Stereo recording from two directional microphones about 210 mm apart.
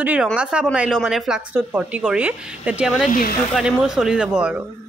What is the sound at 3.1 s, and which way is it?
Speech, 45° left (ahead or behind).